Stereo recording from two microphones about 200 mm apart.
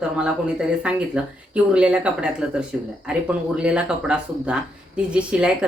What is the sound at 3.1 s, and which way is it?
A woman's voice, 5° right (ahead or behind).